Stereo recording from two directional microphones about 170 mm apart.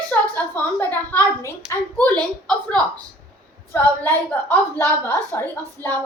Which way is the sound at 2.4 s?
5° left (ahead or behind).